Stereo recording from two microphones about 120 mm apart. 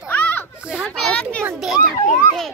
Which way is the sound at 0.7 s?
Centre (ahead or behind).